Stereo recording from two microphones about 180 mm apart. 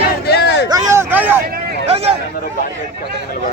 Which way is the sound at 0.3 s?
70° left (ahead or behind).